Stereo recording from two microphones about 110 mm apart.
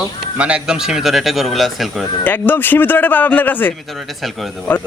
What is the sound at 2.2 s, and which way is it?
Speech, 15° left (ahead or behind).